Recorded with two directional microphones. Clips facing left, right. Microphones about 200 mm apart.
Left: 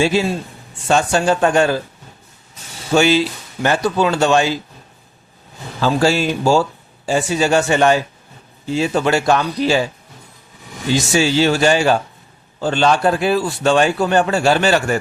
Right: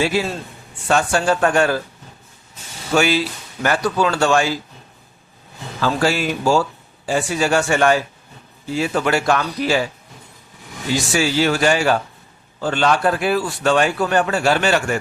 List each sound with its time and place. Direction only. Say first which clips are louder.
0.0 s a man's voice: left 3 dB; 25° left (ahead or behind)
2.9 s a man's voice: left 3 dB; 25° left (ahead or behind)
5.8 s a man's voice: left 3 dB; 25° left (ahead or behind)
10.9 s a man's voice: left 3 dB; 25° left (ahead or behind)